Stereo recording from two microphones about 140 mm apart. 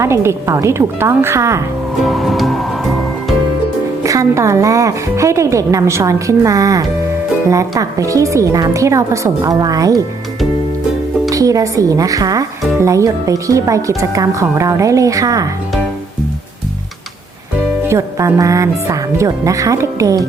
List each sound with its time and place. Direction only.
0.0 s speech: 20° right (ahead or behind)
2.0 s music: centre (ahead or behind)
4.0 s speech: 25° right (ahead or behind)
11.3 s speech: 25° right (ahead or behind)
17.8 s speech: 20° right (ahead or behind)